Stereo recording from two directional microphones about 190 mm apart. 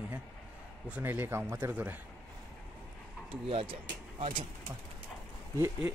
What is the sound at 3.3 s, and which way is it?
Speech, 30° right (ahead or behind).